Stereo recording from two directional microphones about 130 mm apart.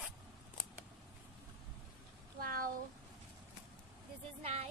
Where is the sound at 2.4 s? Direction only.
90° right.